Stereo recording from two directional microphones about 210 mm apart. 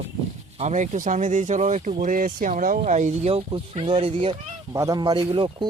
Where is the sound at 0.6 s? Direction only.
35° right (ahead or behind).